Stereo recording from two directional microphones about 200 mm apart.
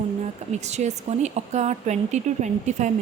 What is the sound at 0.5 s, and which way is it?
Speech, 35° right (ahead or behind).